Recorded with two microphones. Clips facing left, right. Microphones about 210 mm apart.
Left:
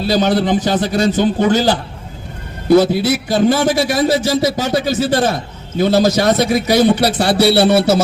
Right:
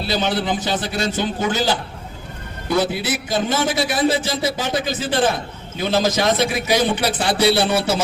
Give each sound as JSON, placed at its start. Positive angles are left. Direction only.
{"t": 0.1, "sound": "a man's voice", "side_deg": 45}